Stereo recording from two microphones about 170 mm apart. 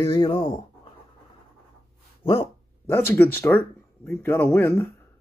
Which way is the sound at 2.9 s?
10° left (ahead or behind).